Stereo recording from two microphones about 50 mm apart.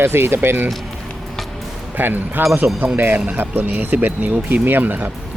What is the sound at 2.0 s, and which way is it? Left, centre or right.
Speech, right.